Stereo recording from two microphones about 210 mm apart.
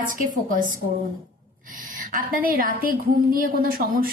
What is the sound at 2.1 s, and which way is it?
A woman's voice, 40° right (ahead or behind).